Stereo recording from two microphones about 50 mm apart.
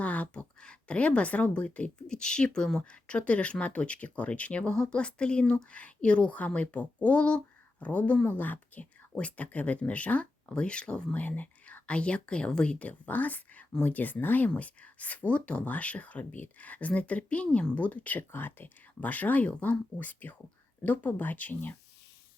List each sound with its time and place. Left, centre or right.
0.0 s a sound: left
0.6 s speech: left
8.3 s speech: left
12.8 s speech: left
14.5 s speech: left
18.3 s speech: left
20.0 s speech: left